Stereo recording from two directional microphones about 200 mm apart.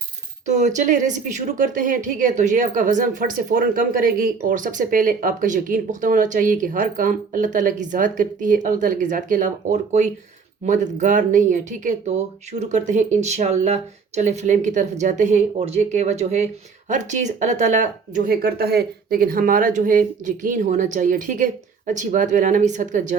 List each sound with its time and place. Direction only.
0.4 s a woman's voice: 35° right (ahead or behind)